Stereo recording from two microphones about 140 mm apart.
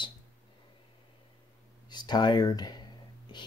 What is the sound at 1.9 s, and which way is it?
Speech, 30° left (ahead or behind).